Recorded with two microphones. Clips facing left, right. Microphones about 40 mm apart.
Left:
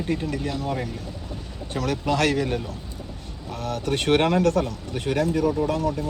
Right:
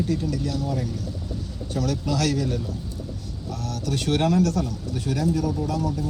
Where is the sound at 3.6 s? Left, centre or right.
Left.